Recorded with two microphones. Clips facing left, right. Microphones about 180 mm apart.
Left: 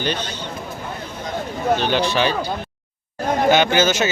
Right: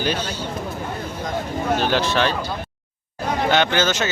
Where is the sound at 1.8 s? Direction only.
Centre (ahead or behind).